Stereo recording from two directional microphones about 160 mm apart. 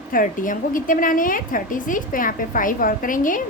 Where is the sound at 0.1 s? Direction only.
60° left (ahead or behind).